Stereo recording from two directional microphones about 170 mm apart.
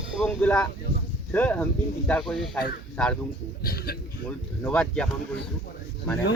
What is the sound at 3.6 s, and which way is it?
Speech, 65° left (ahead or behind).